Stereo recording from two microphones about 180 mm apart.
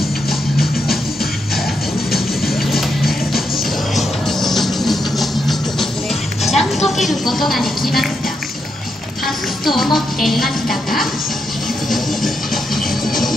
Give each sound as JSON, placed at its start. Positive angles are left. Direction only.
{"t": 2.1, "sound": "music", "side_deg": 0}
{"t": 6.4, "sound": "a woman's voice", "side_deg": 0}
{"t": 9.2, "sound": "music", "side_deg": 0}
{"t": 9.9, "sound": "a woman's voice", "side_deg": 0}
{"t": 12.7, "sound": "music", "side_deg": 0}